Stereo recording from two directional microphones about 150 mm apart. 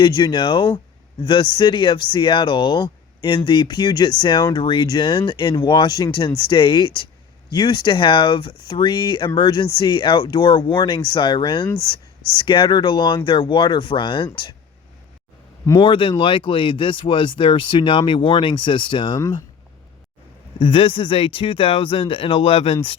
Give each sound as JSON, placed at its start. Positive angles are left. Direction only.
{"t": 0.0, "sound": "speech", "side_deg": 30}
{"t": 15.8, "sound": "speech", "side_deg": 35}
{"t": 20.6, "sound": "speech", "side_deg": 35}